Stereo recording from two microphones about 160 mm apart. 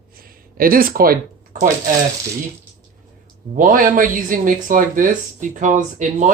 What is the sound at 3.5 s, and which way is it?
Speech, 60° right (ahead or behind).